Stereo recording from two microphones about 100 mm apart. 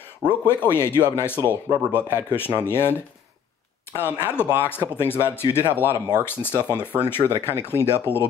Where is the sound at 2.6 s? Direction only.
25° left (ahead or behind).